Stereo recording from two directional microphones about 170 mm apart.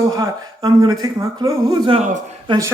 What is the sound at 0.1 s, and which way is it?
Speech, 20° right (ahead or behind).